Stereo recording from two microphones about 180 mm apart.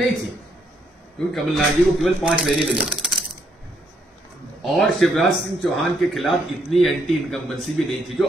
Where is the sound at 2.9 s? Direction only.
Centre (ahead or behind).